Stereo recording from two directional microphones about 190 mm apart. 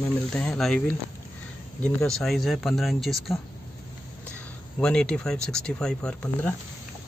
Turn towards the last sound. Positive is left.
turn(degrees=5)  # may be behind; listen again after turning